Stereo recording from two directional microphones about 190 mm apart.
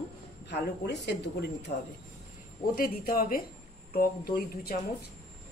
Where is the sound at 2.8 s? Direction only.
50° left (ahead or behind).